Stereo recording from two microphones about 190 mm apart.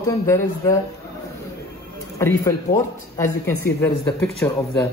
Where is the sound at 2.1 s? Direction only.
15° left (ahead or behind).